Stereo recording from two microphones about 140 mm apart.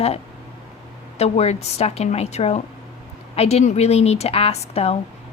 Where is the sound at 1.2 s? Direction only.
50° left (ahead or behind).